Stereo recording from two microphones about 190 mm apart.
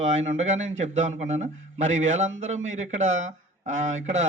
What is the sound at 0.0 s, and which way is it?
A man's voice, 35° right (ahead or behind).